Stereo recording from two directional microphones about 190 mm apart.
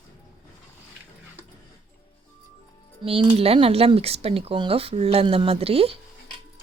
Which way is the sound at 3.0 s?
30° right (ahead or behind).